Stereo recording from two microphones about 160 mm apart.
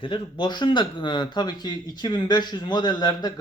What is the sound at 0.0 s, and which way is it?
Speech, 30° left (ahead or behind).